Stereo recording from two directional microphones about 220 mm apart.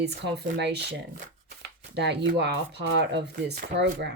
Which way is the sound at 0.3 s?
50° right (ahead or behind).